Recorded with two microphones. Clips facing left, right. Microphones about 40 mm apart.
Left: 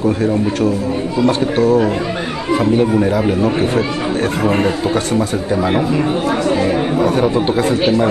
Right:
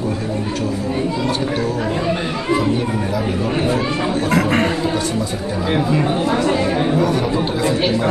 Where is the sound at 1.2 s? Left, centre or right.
Left.